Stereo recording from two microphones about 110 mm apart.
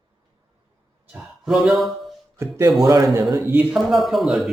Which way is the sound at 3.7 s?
Centre (ahead or behind).